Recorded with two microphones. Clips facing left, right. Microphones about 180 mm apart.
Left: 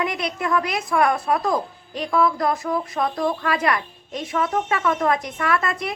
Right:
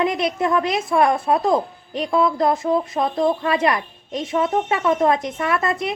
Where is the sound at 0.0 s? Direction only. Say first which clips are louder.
Right 5 dB; 25° right (ahead or behind).